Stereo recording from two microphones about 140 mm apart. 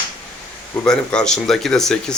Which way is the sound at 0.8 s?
5° left (ahead or behind).